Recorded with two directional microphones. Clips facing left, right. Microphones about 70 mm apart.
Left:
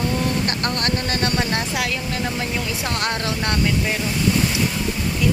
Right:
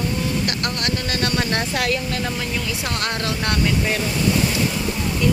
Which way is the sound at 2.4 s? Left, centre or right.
Left.